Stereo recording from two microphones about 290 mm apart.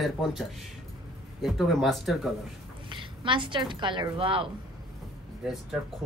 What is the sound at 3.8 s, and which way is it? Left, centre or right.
Speech, centre.